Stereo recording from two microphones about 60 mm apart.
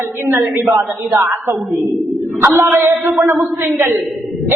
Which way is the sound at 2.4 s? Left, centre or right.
Right.